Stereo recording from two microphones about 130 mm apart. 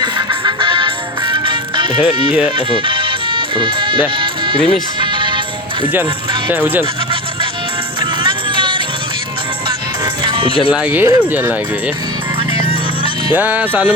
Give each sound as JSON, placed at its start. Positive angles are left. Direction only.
{"t": 0.0, "sound": "music", "side_deg": -35}
{"t": 6.5, "sound": "speech", "side_deg": -15}
{"t": 8.2, "sound": "music", "side_deg": -40}
{"t": 10.2, "sound": "music", "side_deg": -40}
{"t": 10.7, "sound": "speech", "side_deg": -10}
{"t": 13.3, "sound": "speech", "side_deg": -15}